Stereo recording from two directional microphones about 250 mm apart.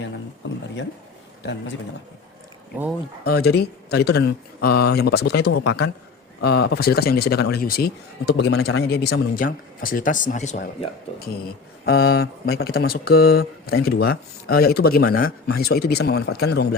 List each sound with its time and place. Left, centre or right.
0.4 s a sound: left
1.4 s a man's voice: left
3.2 s speech: left
11.4 s speech: left